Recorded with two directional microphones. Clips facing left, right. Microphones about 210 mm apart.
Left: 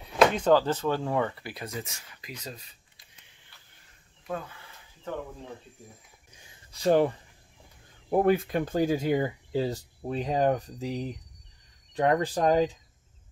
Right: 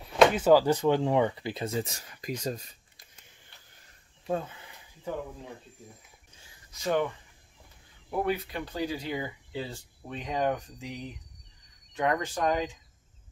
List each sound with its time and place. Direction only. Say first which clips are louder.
0.0 s speech: right 1 dB; centre (ahead or behind); by 3.1 s 45° right (ahead or behind)
4.3 s a sound: right 4 dB; 25° right (ahead or behind)
6.7 s speech: left 6 dB; 35° left (ahead or behind)
8.1 s speech: left 7 dB; 45° left (ahead or behind)